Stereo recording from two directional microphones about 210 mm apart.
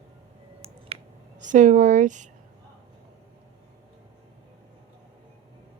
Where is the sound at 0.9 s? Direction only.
30° right (ahead or behind).